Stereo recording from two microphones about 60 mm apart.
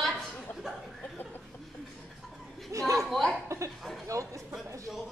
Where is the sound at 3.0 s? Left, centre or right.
Centre.